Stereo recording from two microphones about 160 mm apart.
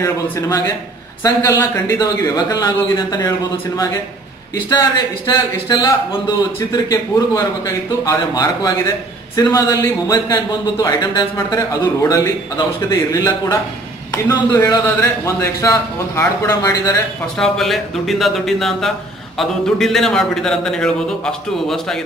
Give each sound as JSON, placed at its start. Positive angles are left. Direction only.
{"t": 0.0, "sound": "a man's voice", "side_deg": 20}
{"t": 17.4, "sound": "a man's voice", "side_deg": 0}